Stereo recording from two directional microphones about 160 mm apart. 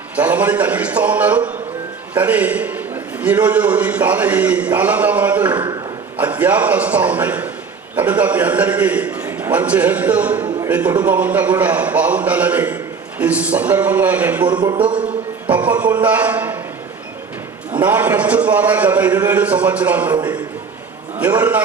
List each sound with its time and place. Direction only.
0.2 s a man's voice: 10° right (ahead or behind)
14.5 s a sound: 25° right (ahead or behind)
15.4 s a man's voice: 10° right (ahead or behind)
17.7 s a man's voice: 10° right (ahead or behind)
21.2 s a man's voice: 10° right (ahead or behind)